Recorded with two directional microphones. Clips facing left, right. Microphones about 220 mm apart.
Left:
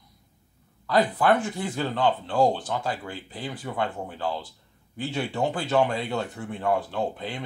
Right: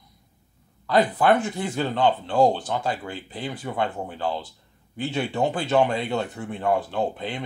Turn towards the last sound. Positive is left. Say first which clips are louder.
# right 3 dB
turn(degrees=-20)  # may be behind; listen again after turning